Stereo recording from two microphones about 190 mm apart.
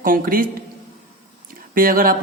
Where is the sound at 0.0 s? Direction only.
45° right (ahead or behind).